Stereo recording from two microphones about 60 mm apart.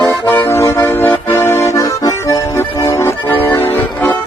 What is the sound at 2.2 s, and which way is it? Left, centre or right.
Accordion, left.